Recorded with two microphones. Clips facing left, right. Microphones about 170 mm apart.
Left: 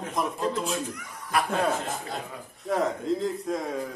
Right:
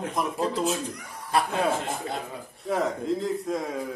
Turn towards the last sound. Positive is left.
turn(degrees=0)  # may be behind; listen again after turning